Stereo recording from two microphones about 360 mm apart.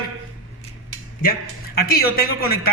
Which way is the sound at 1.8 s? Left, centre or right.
Left.